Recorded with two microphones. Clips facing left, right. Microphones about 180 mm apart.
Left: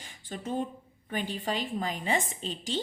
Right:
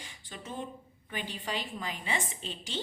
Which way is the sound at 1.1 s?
45° left (ahead or behind).